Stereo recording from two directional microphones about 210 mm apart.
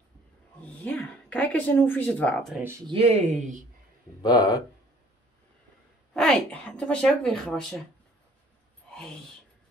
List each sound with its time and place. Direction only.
0.6 s speech: 5° left (ahead or behind)
2.9 s speech: 30° right (ahead or behind)
4.2 s speech: 20° left (ahead or behind)
6.1 s speech: 5° left (ahead or behind)